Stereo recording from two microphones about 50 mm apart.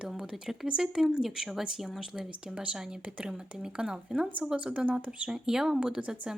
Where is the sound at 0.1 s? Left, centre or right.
Centre; by 5.3 s right.